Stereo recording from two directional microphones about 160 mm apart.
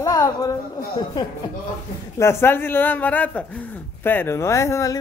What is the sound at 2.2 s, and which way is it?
A man's voice, 15° left (ahead or behind).